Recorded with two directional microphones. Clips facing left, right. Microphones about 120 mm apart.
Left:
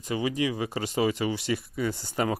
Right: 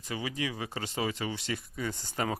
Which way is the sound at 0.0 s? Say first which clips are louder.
Left 7 dB; 15° left (ahead or behind).